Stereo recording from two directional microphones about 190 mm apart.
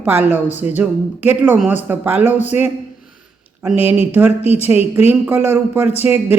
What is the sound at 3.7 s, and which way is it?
Speech, 30° left (ahead or behind).